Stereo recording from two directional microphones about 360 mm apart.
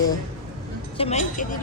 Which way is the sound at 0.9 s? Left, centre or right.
Centre.